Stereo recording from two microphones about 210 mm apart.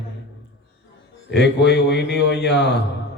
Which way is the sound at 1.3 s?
55° left (ahead or behind).